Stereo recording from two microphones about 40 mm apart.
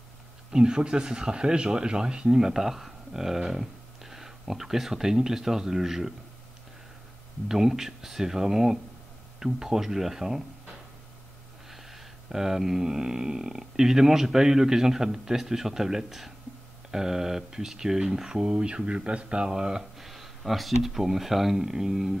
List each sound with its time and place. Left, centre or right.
0.5 s speech: centre
7.4 s speech: centre
11.7 s speech: centre
20.1 s speech: centre